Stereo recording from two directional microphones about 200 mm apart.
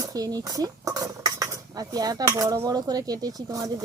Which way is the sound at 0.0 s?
20° right (ahead or behind).